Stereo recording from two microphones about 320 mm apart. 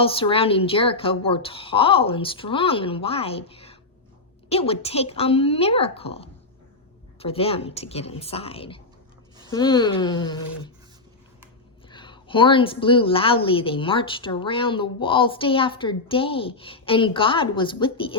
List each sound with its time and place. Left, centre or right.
0.0 s a woman's voice: centre
11.9 s a woman's voice: centre